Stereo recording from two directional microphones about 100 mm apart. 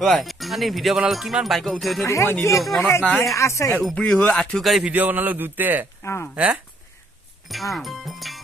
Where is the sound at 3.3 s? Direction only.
30° left (ahead or behind).